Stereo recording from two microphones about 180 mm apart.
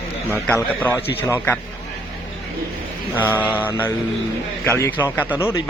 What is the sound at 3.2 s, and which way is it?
Speech, 10° left (ahead or behind).